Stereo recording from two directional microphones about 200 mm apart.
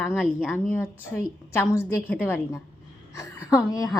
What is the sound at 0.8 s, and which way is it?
A woman's voice, 10° left (ahead or behind).